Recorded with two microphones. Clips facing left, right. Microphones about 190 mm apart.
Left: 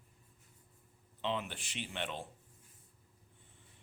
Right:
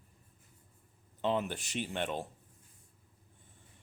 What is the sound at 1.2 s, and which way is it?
Speech, 45° right (ahead or behind).